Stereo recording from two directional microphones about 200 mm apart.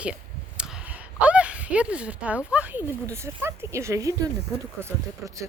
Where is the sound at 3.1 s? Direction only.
10° right (ahead or behind).